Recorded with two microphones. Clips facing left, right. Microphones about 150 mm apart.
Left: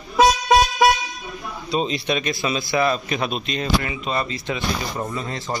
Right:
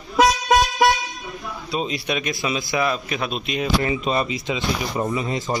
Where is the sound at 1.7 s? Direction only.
10° right (ahead or behind).